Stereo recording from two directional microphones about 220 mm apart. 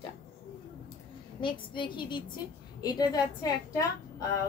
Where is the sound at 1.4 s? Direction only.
20° left (ahead or behind).